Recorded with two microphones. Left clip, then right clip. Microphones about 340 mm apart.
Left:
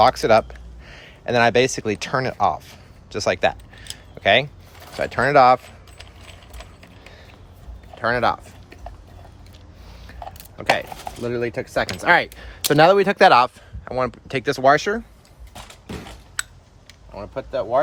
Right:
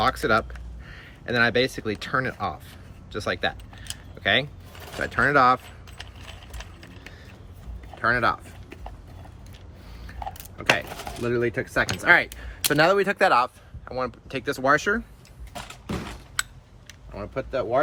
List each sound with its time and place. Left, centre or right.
0.0 s speech: centre
7.9 s speech: left
10.6 s speech: centre
17.2 s speech: centre